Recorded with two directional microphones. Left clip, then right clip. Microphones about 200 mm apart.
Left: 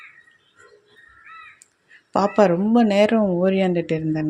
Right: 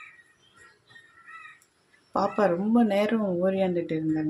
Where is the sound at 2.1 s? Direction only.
35° left (ahead or behind).